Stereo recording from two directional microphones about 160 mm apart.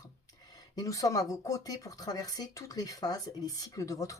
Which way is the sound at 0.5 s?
20° left (ahead or behind).